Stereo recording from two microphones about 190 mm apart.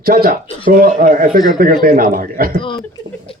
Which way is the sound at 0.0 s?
50° right (ahead or behind).